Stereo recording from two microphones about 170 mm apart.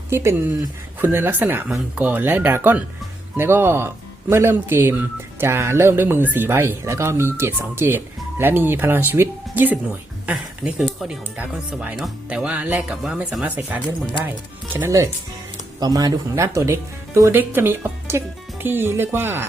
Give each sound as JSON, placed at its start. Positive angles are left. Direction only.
{"t": 0.1, "sound": "speech", "side_deg": -15}